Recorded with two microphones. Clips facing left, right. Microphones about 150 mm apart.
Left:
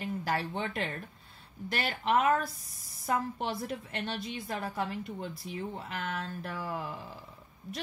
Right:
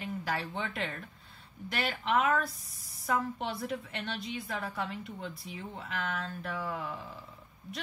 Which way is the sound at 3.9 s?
40° left (ahead or behind).